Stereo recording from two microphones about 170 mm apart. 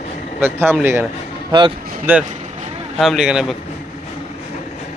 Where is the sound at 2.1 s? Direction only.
10° right (ahead or behind).